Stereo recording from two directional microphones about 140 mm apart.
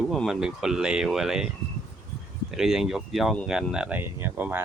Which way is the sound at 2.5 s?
5° right (ahead or behind).